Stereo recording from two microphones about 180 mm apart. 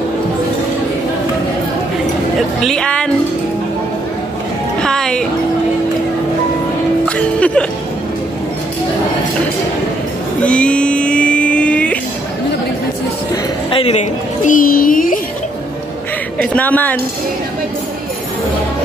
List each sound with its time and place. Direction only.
2.6 s speech: 5° left (ahead or behind)
4.7 s music: 5° left (ahead or behind)
7.1 s music: 5° left (ahead or behind)
10.4 s a sound: 5° left (ahead or behind)
13.7 s a sound: 30° left (ahead or behind); by 15.1 s 50° left (ahead or behind)
16.3 s speech: 10° left (ahead or behind)